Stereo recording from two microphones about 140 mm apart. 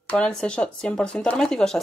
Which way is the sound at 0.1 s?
5° left (ahead or behind).